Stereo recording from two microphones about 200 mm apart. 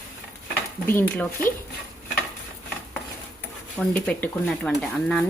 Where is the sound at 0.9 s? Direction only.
10° left (ahead or behind).